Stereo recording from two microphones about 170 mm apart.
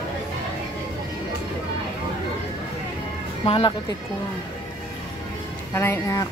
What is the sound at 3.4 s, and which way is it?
Speech, 35° left (ahead or behind).